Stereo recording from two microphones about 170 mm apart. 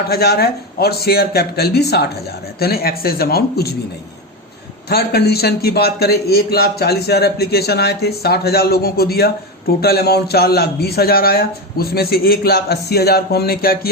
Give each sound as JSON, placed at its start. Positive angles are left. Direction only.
{"t": 0.1, "sound": "a man's voice", "side_deg": 70}
{"t": 4.9, "sound": "a man's voice", "side_deg": 65}